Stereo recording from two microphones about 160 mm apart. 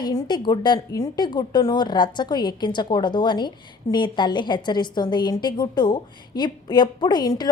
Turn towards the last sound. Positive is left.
turn(degrees=25)  # may be behind; listen again after turning